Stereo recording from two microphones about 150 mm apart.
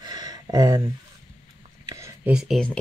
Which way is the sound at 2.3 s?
Centre (ahead or behind).